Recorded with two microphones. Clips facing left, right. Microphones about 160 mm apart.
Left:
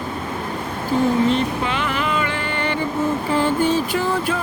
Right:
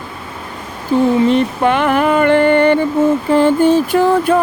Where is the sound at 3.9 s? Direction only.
50° right (ahead or behind).